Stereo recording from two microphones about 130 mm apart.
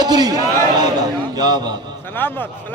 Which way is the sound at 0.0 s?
30° right (ahead or behind).